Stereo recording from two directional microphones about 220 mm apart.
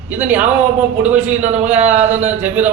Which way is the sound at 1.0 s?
30° right (ahead or behind).